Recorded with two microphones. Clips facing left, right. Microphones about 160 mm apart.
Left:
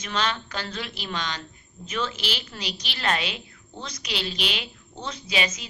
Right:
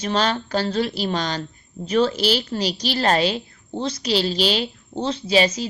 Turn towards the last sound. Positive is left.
turn(degrees=-35)  # may be behind; listen again after turning